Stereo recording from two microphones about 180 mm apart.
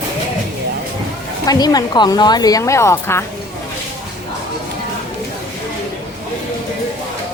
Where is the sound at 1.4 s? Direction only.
20° left (ahead or behind).